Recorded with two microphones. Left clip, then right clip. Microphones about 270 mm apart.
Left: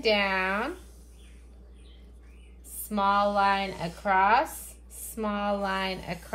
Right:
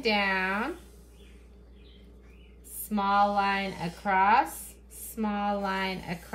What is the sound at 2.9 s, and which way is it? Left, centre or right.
Speech, centre.